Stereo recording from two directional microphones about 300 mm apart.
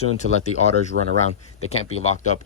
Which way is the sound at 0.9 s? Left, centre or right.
Right.